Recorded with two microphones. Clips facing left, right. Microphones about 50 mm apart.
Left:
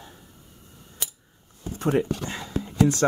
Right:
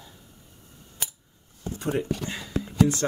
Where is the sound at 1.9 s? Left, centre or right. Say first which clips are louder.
Left 4 dB; left.